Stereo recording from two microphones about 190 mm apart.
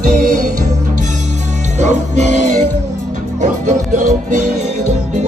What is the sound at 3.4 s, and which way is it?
Music, 40° right (ahead or behind).